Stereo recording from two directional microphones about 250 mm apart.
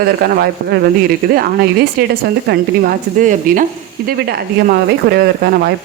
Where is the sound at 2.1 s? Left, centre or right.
Right.